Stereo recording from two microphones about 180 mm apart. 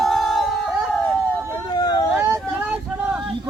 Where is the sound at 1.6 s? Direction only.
25° left (ahead or behind).